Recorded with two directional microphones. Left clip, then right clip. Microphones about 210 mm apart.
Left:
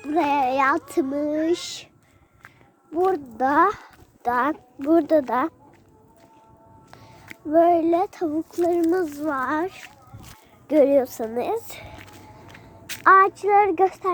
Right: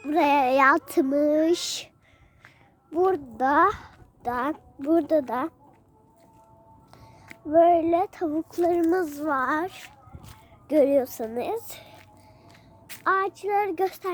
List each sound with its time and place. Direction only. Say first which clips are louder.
0.1 s a sound: even; 40° right (ahead or behind)
1.1 s speech: right 4 dB; 35° right (ahead or behind)
2.9 s a child's voice: left 1 dB; 20° right (ahead or behind)
4.2 s a child's voice: left 5 dB; centre (ahead or behind)
4.9 s child singing: left 4 dB; centre (ahead or behind)
6.9 s music: left 5 dB; centre (ahead or behind)
7.4 s child singing: left 1 dB; 15° right (ahead or behind)
8.9 s a child's voice: left 1 dB; 30° right (ahead or behind)
10.7 s child singing: left 3 dB; 10° right (ahead or behind)
13.0 s child singing: left 9 dB; centre (ahead or behind)